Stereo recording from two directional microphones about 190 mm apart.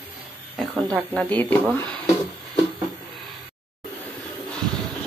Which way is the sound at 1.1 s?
10° left (ahead or behind).